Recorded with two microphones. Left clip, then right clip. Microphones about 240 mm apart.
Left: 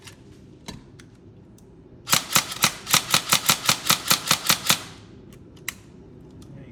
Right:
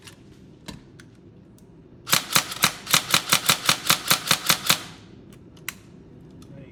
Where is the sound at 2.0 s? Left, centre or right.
Centre.